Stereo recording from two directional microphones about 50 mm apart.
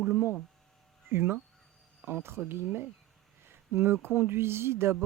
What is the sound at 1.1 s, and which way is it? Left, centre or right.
Speech, right.